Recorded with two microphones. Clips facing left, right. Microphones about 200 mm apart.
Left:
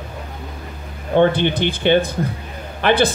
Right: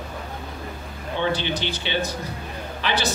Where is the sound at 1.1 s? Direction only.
55° left (ahead or behind).